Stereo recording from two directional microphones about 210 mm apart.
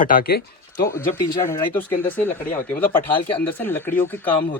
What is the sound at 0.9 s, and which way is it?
Speech, 15° left (ahead or behind).